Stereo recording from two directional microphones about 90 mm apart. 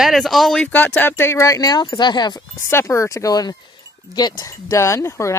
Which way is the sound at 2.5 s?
30° left (ahead or behind).